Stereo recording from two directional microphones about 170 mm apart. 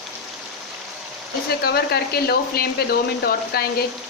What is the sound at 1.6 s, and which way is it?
Speech, 70° left (ahead or behind).